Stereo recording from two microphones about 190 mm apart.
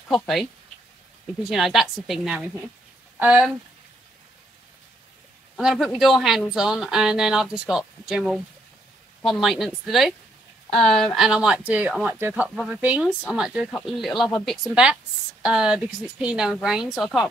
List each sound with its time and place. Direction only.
0.1 s speech: centre (ahead or behind)
5.6 s speech: centre (ahead or behind)